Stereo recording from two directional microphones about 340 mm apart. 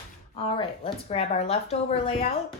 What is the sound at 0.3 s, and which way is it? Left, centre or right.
Speech, centre.